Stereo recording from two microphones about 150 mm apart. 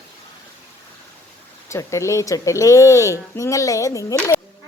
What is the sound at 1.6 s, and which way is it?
Speech, 20° left (ahead or behind).